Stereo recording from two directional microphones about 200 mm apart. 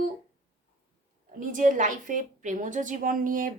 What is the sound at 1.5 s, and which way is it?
A woman's voice, 40° right (ahead or behind).